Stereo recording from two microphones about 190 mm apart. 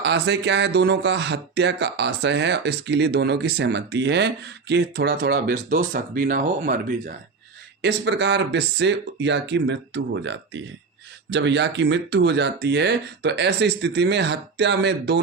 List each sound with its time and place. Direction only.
0.0 s speech: 65° right (ahead or behind); by 7.1 s 45° right (ahead or behind)
7.8 s speech: 65° right (ahead or behind)